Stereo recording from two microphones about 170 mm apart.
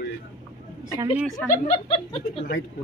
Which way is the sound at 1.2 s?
Centre (ahead or behind).